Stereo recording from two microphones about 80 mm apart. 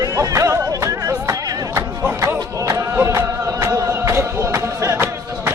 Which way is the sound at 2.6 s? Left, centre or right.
Right.